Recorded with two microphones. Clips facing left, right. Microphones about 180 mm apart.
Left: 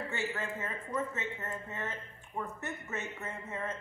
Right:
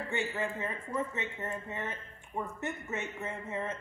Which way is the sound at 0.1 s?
15° right (ahead or behind).